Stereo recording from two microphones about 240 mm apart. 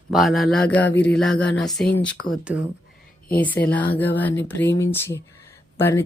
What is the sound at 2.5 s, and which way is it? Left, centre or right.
Speech, centre.